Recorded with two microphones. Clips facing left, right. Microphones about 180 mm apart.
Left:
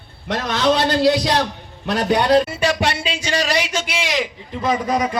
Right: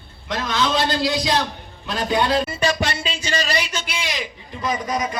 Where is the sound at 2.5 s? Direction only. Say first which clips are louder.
Left 2 dB; 65° left (ahead or behind); by 4.3 s 90° left.